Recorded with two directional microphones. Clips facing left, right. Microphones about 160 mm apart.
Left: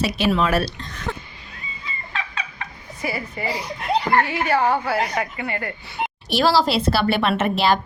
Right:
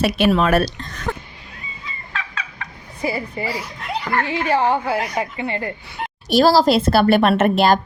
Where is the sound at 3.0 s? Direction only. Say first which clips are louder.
Right 4 dB; 30° right (ahead or behind).